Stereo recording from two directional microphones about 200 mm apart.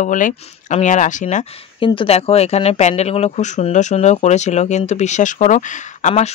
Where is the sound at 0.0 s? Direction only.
40° left (ahead or behind).